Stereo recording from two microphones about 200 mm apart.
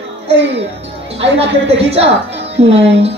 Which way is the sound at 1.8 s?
30° right (ahead or behind).